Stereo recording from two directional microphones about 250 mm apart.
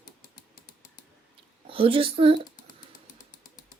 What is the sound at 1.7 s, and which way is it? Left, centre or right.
Speech, right.